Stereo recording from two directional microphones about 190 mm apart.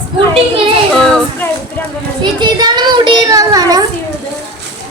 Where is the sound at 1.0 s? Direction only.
5° left (ahead or behind).